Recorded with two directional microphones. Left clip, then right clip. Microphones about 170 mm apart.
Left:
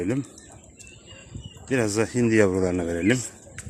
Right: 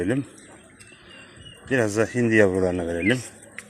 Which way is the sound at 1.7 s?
20° left (ahead or behind).